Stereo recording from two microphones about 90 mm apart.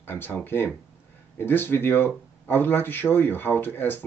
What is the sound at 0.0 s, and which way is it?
Speech, 25° left (ahead or behind).